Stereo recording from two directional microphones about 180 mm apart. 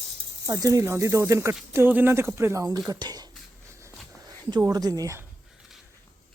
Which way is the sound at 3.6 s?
15° right (ahead or behind).